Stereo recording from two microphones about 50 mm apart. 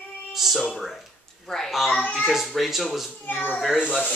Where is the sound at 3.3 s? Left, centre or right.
Left.